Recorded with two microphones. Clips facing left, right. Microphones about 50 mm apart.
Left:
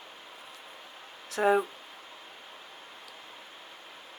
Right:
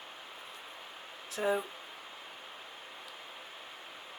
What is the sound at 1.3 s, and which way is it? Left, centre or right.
Speech, left.